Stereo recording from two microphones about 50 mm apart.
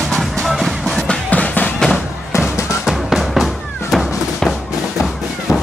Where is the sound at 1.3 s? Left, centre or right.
Left.